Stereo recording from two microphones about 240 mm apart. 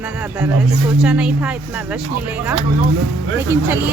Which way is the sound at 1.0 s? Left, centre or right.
Centre.